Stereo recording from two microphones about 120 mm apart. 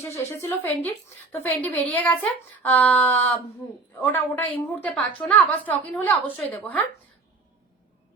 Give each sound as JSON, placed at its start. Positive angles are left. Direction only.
{"t": 0.3, "sound": "speech", "side_deg": 20}